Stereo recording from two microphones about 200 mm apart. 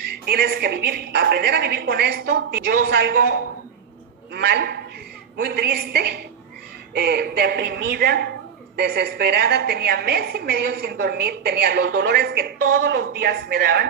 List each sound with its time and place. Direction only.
0.3 s a woman's voice: 55° right (ahead or behind)
4.3 s a woman's voice: 55° right (ahead or behind)